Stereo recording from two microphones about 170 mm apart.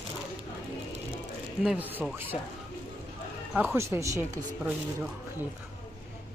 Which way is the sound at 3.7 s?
15° right (ahead or behind).